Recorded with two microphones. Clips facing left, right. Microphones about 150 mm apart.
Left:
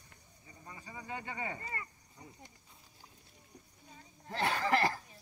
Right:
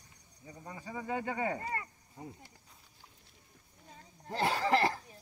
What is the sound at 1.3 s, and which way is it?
Speech, 55° right (ahead or behind).